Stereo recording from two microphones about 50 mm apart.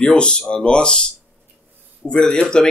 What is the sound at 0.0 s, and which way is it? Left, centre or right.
Speech, left.